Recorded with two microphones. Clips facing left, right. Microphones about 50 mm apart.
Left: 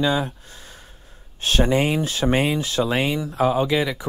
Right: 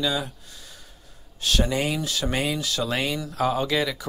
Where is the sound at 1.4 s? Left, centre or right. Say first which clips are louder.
Left 5 dB; left.